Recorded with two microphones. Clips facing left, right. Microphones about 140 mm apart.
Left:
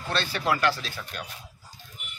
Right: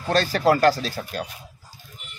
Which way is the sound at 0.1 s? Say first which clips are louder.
Right 8 dB; 40° right (ahead or behind).